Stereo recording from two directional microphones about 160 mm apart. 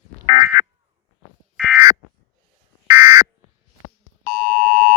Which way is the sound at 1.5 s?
5° right (ahead or behind).